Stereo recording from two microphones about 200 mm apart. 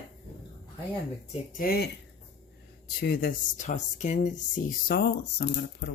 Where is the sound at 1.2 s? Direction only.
40° left (ahead or behind).